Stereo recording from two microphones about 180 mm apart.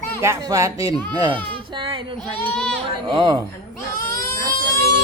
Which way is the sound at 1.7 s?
25° right (ahead or behind).